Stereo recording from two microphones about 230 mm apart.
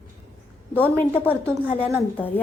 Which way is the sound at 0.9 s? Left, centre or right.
Centre.